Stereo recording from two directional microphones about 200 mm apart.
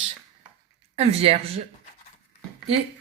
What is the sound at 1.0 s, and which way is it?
Speech, 30° right (ahead or behind).